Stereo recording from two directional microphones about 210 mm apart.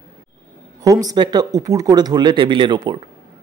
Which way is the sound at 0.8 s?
15° right (ahead or behind).